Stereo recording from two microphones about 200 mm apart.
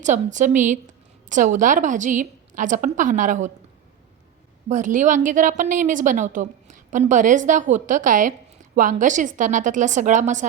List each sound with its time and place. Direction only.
0.0 s a woman's voice: 40° right (ahead or behind)
4.7 s a woman's voice: 40° right (ahead or behind)